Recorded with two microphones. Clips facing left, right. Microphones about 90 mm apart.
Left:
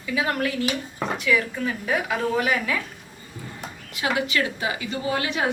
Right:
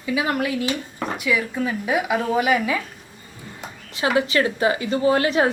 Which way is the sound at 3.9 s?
30° right (ahead or behind).